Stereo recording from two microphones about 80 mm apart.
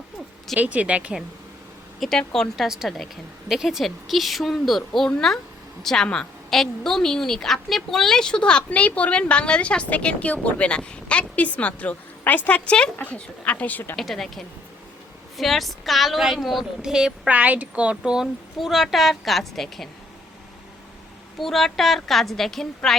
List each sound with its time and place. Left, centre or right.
0.5 s speech: centre
2.0 s a woman's voice: centre
2.6 s a woman's voice: centre; by 13.9 s left
13.9 s a woman's voice: centre
17.2 s a woman's voice: centre
21.3 s a woman's voice: centre